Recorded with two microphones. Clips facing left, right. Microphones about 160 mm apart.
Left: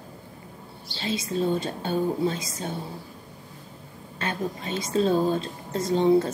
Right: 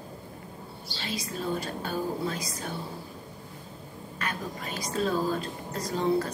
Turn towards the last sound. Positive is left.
turn(degrees=25)  # may be behind; listen again after turning